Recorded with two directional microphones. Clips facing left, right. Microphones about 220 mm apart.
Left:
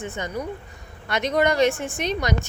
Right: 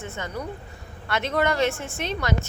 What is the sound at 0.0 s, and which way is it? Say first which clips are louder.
A woman's voice: left 3 dB; 15° left (ahead or behind).